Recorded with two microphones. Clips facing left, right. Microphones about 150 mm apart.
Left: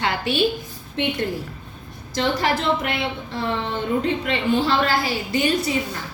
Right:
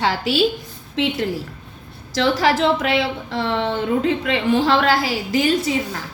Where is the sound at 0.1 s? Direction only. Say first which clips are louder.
Right 2 dB; 90° right.